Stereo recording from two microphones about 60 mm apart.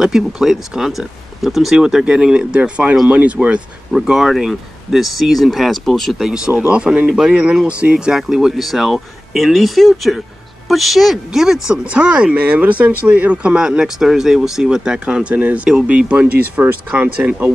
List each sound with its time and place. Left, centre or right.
0.0 s speech: centre
6.1 s speech: centre